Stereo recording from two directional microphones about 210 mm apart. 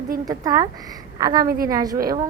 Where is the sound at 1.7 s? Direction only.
15° right (ahead or behind).